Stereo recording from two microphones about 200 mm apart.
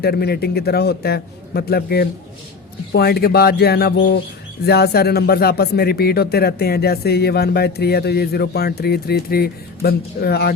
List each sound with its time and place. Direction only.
0.0 s speech: 55° left (ahead or behind)